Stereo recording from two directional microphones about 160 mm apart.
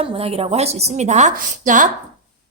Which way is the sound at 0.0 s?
35° right (ahead or behind).